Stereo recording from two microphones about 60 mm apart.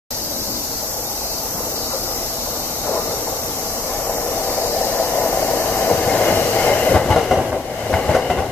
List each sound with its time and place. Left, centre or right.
5.2 s a sound: left
6.3 s train: left
7.2 s train: centre